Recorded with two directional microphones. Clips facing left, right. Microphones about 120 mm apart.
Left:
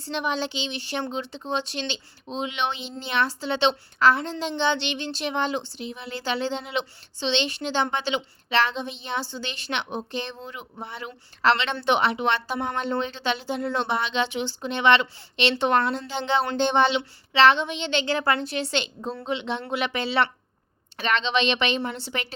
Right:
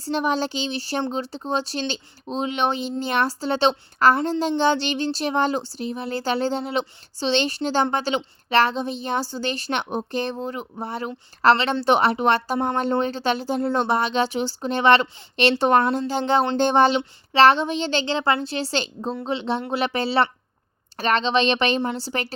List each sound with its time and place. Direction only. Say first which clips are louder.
0.0 s a woman's voice: right 5 dB; 40° right (ahead or behind)
18.1 s a woman's voice: even; 25° right (ahead or behind)